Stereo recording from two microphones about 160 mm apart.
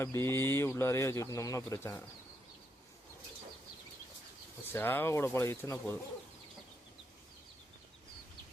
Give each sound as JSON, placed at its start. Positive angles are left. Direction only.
{"t": 0.0, "sound": "speech", "side_deg": 15}
{"t": 4.7, "sound": "speech", "side_deg": 10}